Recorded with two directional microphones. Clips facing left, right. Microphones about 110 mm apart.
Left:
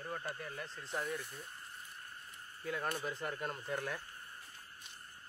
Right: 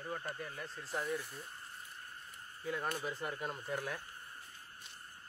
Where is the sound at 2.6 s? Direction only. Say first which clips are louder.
Even; centre (ahead or behind).